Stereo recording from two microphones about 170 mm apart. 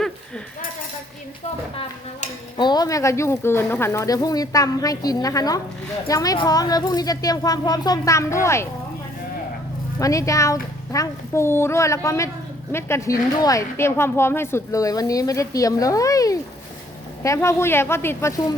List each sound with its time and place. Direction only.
2.6 s speech: 25° left (ahead or behind)
10.0 s speech: 20° left (ahead or behind)